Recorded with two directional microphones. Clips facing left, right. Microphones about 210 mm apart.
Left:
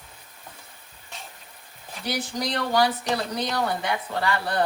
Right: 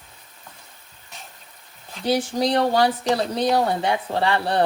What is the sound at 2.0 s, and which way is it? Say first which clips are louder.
Speech: right 8 dB; 30° right (ahead or behind).